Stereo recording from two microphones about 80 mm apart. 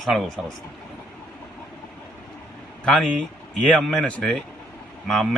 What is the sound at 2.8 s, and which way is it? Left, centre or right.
A man's voice, centre.